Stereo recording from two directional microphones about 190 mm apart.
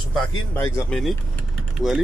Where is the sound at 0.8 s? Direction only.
Centre (ahead or behind).